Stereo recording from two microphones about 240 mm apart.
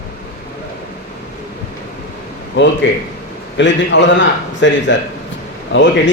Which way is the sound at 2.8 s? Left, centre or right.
Left.